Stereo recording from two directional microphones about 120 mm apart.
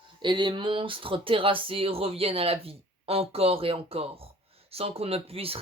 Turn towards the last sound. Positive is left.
turn(degrees=-55)  # may be behind; listen again after turning